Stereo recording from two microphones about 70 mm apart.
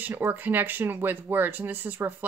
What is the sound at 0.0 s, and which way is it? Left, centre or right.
Speech, right.